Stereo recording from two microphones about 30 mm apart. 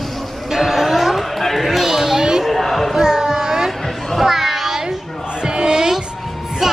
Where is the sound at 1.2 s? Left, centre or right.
Centre.